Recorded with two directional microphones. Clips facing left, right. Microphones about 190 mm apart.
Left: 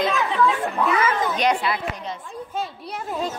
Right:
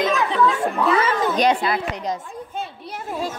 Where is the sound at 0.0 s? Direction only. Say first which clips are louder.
Right 2 dB; 45° right (ahead or behind).